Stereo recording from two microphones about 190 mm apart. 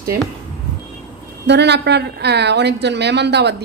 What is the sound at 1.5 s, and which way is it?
A woman's voice, 65° right (ahead or behind).